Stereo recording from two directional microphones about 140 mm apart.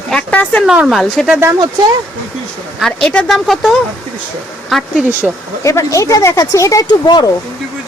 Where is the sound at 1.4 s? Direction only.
25° right (ahead or behind).